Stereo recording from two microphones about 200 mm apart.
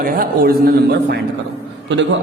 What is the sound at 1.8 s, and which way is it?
Speech, 65° right (ahead or behind).